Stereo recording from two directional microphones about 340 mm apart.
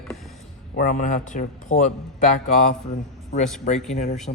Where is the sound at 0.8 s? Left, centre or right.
Left.